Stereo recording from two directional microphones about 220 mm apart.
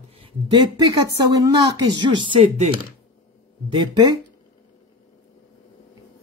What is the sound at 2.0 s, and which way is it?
Speech, 20° right (ahead or behind).